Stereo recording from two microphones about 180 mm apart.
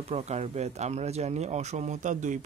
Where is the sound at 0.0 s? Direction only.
35° right (ahead or behind).